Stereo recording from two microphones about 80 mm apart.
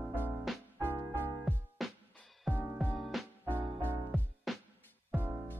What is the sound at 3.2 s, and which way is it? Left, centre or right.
Music, centre.